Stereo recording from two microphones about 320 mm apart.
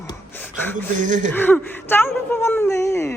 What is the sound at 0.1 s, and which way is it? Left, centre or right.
Gasp, centre.